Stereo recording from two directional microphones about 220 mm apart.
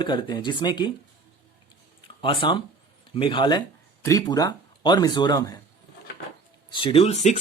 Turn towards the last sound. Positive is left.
turn(degrees=30)  # may be behind; listen again after turning